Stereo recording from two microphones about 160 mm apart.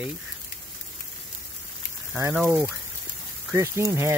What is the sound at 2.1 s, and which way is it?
Speech, 10° right (ahead or behind).